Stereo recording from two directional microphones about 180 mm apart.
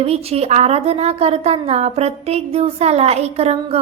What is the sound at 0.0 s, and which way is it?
A woman's voice, 35° right (ahead or behind).